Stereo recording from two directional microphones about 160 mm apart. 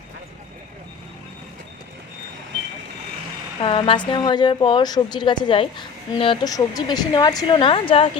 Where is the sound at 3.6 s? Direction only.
35° left (ahead or behind).